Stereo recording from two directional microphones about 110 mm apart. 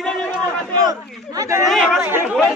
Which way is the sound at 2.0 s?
20° right (ahead or behind).